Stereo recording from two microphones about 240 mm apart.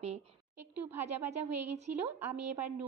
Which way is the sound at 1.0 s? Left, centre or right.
Right.